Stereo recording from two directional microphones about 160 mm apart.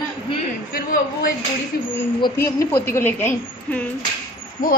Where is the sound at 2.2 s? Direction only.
20° left (ahead or behind).